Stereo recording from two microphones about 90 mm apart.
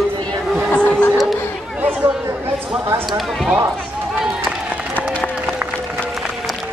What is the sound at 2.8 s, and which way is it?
Speech, 30° right (ahead or behind).